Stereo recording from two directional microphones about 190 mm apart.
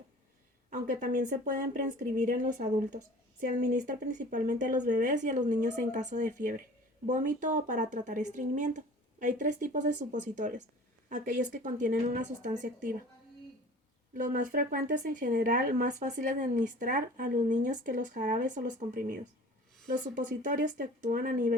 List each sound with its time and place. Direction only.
0.7 s speech: 40° right (ahead or behind)
14.1 s speech: 45° right (ahead or behind)